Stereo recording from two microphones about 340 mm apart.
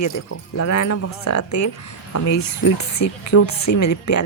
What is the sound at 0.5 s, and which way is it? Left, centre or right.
A woman's voice, left.